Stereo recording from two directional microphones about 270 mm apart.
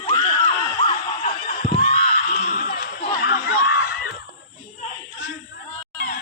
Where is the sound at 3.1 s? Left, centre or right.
Left.